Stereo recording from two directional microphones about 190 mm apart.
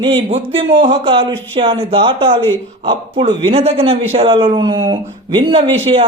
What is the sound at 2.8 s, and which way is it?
A man's voice, 25° right (ahead or behind).